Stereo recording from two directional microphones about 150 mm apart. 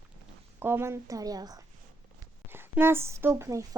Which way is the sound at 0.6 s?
15° right (ahead or behind).